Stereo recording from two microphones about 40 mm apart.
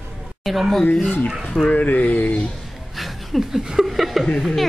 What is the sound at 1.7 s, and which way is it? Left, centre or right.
Speech, left.